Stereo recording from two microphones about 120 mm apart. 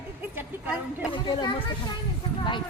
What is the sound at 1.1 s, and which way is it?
Speech, 40° left (ahead or behind).